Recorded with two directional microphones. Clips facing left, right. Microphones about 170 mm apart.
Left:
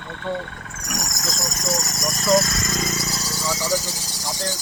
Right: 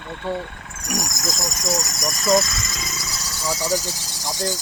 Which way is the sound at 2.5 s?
50° left (ahead or behind).